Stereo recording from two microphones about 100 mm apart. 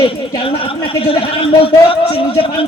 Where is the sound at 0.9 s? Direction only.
65° left (ahead or behind).